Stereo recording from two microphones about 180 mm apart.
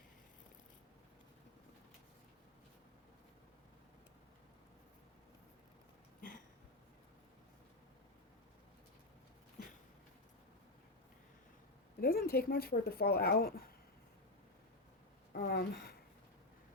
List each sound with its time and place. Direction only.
11.9 s speech: 55° left (ahead or behind)
15.3 s speech: 60° left (ahead or behind)